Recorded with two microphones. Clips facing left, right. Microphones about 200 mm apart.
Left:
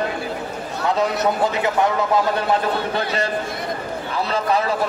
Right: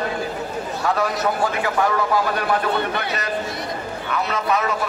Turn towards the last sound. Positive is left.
turn(degrees=30)  # may be behind; listen again after turning